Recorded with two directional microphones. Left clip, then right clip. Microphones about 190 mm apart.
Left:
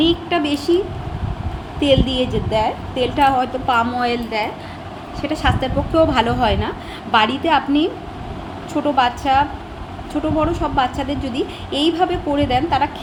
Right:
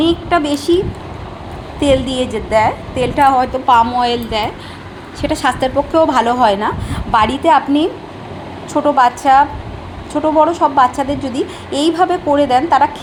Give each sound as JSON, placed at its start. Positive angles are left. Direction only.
{"t": 0.0, "sound": "a woman's voice", "side_deg": -10}
{"t": 1.8, "sound": "a woman's voice", "side_deg": -10}
{"t": 5.2, "sound": "a woman's voice", "side_deg": -25}
{"t": 5.9, "sound": "a woman's voice", "side_deg": -10}